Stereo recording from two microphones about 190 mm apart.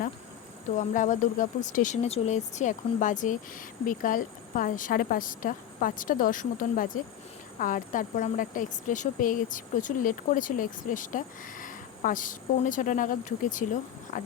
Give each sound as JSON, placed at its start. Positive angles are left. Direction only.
{"t": 0.8, "sound": "speech", "side_deg": 40}